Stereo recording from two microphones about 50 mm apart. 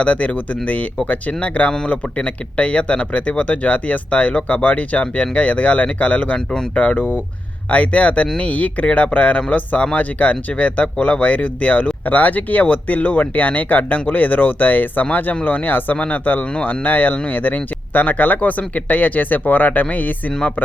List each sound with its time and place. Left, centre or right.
0.0 s speech: left